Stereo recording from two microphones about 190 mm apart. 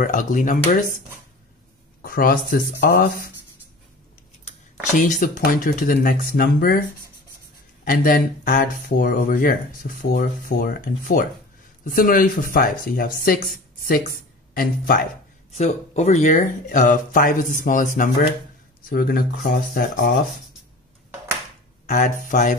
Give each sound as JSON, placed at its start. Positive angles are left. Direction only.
{"t": 0.0, "sound": "speech", "side_deg": 45}
{"t": 2.0, "sound": "speech", "side_deg": 50}
{"t": 4.9, "sound": "speech", "side_deg": 40}
{"t": 7.8, "sound": "speech", "side_deg": 50}
{"t": 15.5, "sound": "speech", "side_deg": 35}
{"t": 21.8, "sound": "speech", "side_deg": 40}